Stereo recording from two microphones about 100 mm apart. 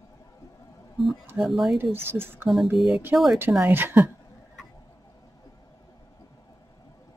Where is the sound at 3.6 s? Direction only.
20° right (ahead or behind).